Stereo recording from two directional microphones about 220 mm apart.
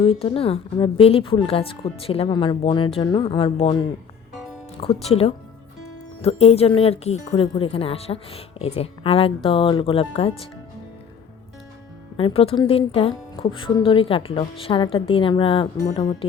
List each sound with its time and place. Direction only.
0.0 s speech: 25° left (ahead or behind)
5.0 s speech: 25° left (ahead or behind)
12.1 s speech: 25° left (ahead or behind)